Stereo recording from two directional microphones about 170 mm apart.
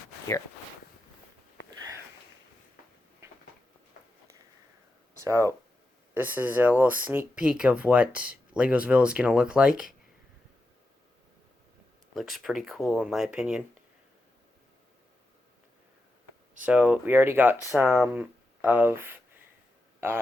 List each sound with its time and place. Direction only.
3.2 s a sound: 20° right (ahead or behind)
5.2 s speech: 20° right (ahead or behind)
12.1 s speech: centre (ahead or behind)
16.6 s speech: 10° right (ahead or behind)